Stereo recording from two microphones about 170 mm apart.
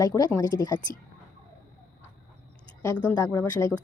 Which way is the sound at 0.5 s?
70° left (ahead or behind).